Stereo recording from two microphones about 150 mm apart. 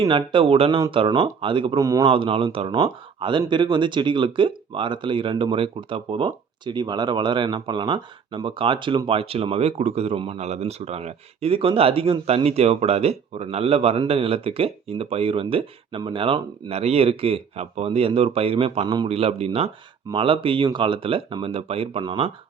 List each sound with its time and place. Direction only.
0.0 s speech: 30° right (ahead or behind)
1.8 s a man's voice: 25° right (ahead or behind)
2.0 s speech: 35° right (ahead or behind)